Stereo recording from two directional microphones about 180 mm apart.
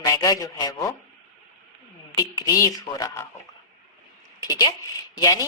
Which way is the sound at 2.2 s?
20° left (ahead or behind).